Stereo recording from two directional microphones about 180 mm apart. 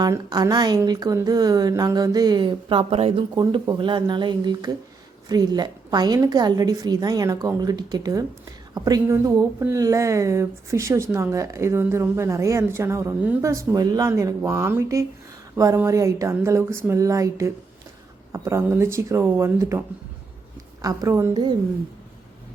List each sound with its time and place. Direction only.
0.0 s a woman's voice: 20° right (ahead or behind)
20.8 s a woman's voice: 20° right (ahead or behind)